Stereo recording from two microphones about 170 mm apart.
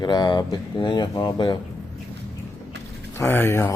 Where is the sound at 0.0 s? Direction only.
25° left (ahead or behind).